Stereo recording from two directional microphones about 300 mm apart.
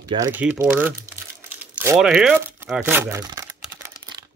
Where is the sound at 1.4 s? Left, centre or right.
Centre.